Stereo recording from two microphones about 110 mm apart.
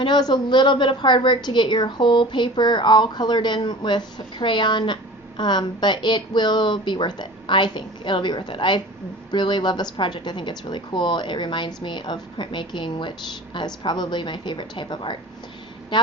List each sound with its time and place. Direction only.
0.0 s a woman's voice: 40° left (ahead or behind)